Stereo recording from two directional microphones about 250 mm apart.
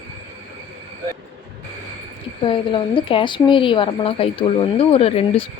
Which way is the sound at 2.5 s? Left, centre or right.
Centre.